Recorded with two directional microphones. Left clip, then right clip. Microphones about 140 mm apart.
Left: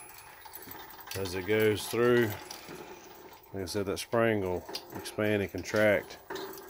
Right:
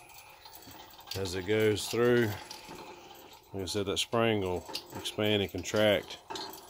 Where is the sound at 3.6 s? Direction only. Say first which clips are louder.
Right 1 dB; 25° right (ahead or behind).